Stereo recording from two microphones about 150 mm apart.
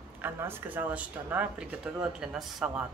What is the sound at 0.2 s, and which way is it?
Speech, 15° right (ahead or behind).